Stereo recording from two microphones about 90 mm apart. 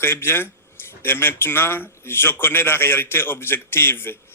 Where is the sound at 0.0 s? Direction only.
25° left (ahead or behind).